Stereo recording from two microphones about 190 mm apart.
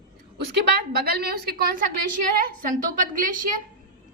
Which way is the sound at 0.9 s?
55° right (ahead or behind).